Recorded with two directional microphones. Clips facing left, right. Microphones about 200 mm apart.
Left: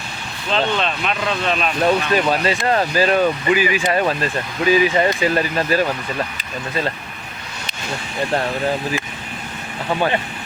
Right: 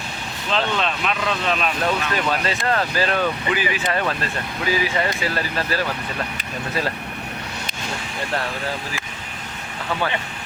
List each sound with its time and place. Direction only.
0.5 s speech: centre (ahead or behind)
2.1 s speech: 15° left (ahead or behind)